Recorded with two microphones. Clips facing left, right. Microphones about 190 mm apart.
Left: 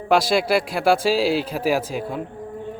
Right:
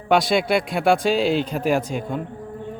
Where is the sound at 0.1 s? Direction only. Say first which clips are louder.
Even; centre (ahead or behind).